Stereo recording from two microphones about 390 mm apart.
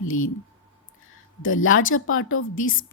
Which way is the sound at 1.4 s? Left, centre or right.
Left.